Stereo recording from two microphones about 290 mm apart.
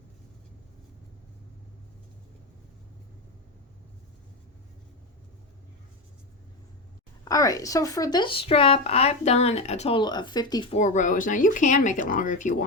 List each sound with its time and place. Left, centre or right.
7.3 s a woman's voice: centre